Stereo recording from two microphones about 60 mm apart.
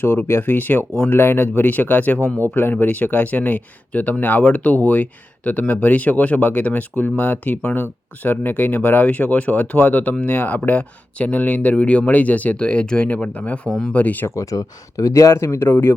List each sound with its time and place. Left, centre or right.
0.0 s speech: left
13.7 s speech: centre
13.9 s speech: left
14.3 s speech: left
15.4 s speech: left